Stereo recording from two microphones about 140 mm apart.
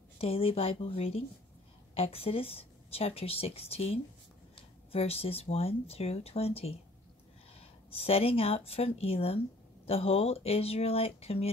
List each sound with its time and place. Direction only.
0.2 s speech: 45° left (ahead or behind)
7.9 s speech: 45° left (ahead or behind)